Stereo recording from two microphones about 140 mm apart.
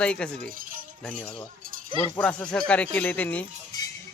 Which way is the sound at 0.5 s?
80° right.